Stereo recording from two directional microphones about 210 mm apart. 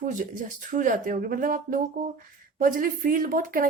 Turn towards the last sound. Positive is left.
turn(degrees=-40)  # may be behind; listen again after turning